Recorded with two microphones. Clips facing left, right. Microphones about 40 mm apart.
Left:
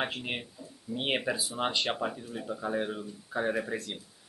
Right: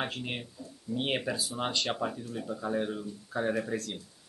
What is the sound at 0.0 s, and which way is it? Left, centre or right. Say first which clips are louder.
Speech: left 1 dB; centre.